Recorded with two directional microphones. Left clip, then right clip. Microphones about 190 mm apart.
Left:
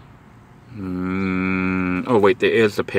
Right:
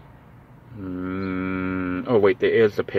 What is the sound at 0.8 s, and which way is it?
Cattle, 35° left (ahead or behind).